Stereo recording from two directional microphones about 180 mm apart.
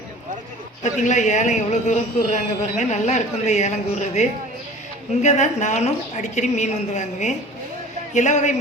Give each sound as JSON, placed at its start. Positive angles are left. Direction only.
{"t": 0.8, "sound": "speech", "side_deg": 40}